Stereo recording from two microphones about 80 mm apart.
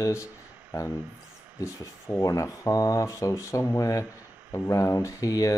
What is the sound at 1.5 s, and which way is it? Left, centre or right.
Speech, left.